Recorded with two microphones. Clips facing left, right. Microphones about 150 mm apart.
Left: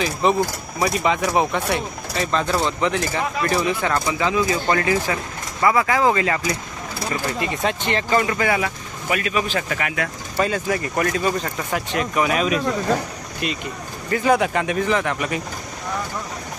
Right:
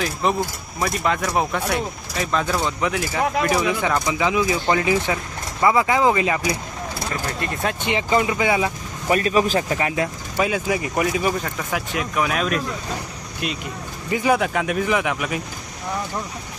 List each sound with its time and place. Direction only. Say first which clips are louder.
0.0 s speech: left 3 dB; centre (ahead or behind)
7.1 s speech: left 5 dB; 5° left (ahead or behind)
7.9 s speech: right 1 dB; 15° right (ahead or behind)
9.0 s speech: right 4 dB; 35° right (ahead or behind)
10.3 s speech: even; 10° right (ahead or behind)